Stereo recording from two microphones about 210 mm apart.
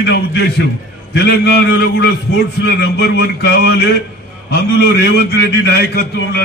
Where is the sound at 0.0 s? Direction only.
50° left (ahead or behind).